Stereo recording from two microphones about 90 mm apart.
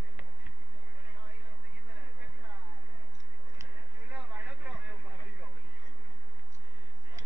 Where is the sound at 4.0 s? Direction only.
15° right (ahead or behind).